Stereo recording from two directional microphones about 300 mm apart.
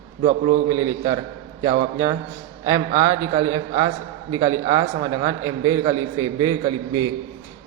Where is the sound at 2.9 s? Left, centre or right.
Centre.